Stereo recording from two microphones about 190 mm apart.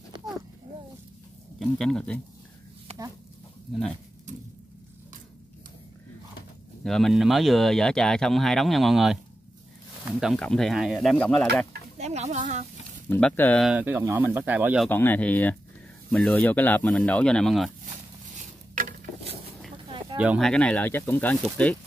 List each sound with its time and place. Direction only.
1.6 s speech: centre (ahead or behind)
6.8 s speech: centre (ahead or behind)
12.0 s speech: 35° right (ahead or behind)
13.1 s speech: 10° left (ahead or behind)
13.7 s speech: 10° right (ahead or behind)
14.9 s speech: 10° left (ahead or behind)
18.8 s a sound: 45° right (ahead or behind)
20.2 s speech: 5° right (ahead or behind)